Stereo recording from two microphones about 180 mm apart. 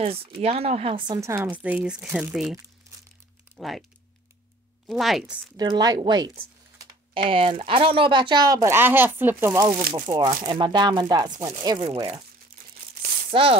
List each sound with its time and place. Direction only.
0.0 s speech: 30° right (ahead or behind); by 2.5 s 5° right (ahead or behind)
3.5 s speech: centre (ahead or behind)
4.8 s speech: centre (ahead or behind)
5.6 s speech: 20° right (ahead or behind)
13.0 s a sound: 30° right (ahead or behind)